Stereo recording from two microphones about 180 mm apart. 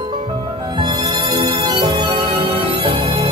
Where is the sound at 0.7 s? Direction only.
25° right (ahead or behind).